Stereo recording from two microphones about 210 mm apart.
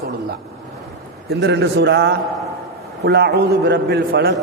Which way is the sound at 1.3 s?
55° right (ahead or behind).